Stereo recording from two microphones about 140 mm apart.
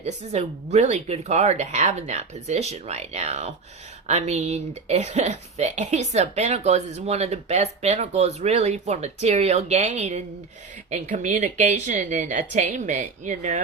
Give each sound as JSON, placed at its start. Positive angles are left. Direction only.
{"t": 0.0, "sound": "a woman's voice", "side_deg": -50}